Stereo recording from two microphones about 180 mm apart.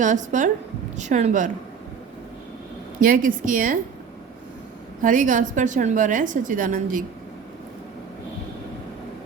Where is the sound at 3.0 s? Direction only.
50° right (ahead or behind).